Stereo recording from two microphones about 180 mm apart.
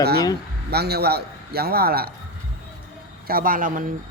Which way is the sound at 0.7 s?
60° right (ahead or behind).